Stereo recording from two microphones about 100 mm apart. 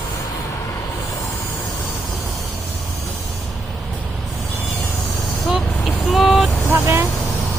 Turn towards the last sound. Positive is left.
turn(degrees=-25)  # may be behind; listen again after turning